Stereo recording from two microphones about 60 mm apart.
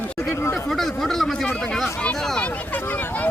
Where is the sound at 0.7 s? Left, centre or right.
Centre.